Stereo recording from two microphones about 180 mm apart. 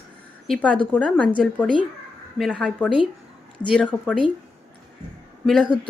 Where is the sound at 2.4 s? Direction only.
Centre (ahead or behind).